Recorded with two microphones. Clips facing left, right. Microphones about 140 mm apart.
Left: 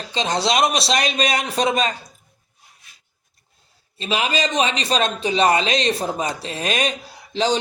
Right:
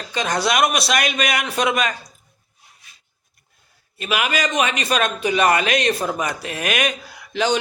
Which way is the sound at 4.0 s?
30° left (ahead or behind).